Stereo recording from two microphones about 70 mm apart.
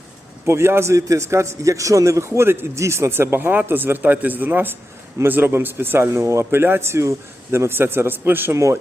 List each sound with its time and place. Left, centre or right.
0.4 s a man's voice: right
8.5 s speech: right